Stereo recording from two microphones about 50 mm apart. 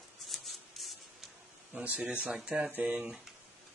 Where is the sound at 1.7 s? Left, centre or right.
Right.